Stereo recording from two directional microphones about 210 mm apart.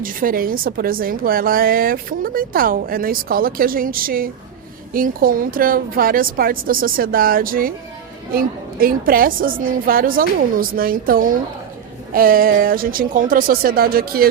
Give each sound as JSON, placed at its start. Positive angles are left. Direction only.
{"t": 0.0, "sound": "a woman's voice", "side_deg": -40}